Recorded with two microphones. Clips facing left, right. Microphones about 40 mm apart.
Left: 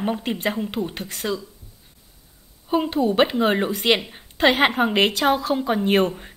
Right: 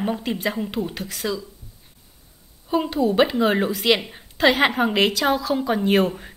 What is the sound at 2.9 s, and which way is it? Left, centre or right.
A woman's voice, centre.